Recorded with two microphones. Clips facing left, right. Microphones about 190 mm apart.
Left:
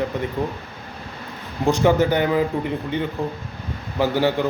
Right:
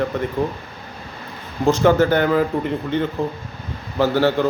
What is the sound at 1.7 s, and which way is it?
Speech, 15° left (ahead or behind).